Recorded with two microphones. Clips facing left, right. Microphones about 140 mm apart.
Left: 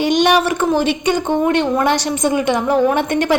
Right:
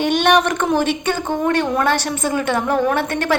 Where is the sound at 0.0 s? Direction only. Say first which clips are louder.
Left 1 dB; 10° left (ahead or behind).